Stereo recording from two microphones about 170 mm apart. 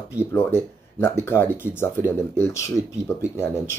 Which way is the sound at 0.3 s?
15° left (ahead or behind).